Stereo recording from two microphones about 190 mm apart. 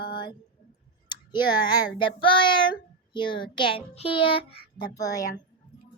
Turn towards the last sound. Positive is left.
turn(degrees=20)  # may be behind; listen again after turning